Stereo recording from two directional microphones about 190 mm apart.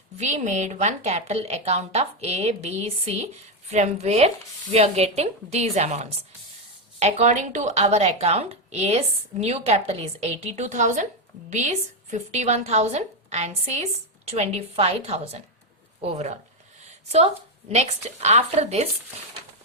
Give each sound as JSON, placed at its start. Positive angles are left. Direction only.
{"t": 0.2, "sound": "a woman's voice", "side_deg": -35}